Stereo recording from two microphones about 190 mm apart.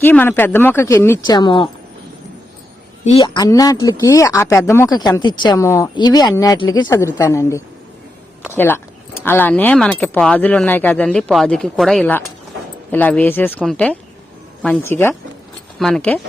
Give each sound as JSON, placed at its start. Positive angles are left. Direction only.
{"t": 0.0, "sound": "speech", "side_deg": 10}
{"t": 3.0, "sound": "speech", "side_deg": 30}